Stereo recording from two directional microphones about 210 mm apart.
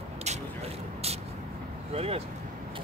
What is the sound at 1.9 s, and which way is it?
Speech, 30° right (ahead or behind).